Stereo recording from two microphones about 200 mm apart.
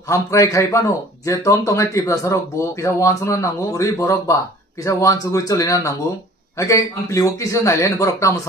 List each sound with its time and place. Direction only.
0.1 s speech: 15° left (ahead or behind)